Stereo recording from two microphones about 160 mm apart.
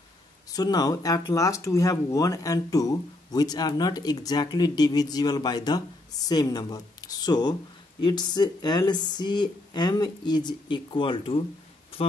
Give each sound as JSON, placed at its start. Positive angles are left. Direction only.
{"t": 0.5, "sound": "speech", "side_deg": 25}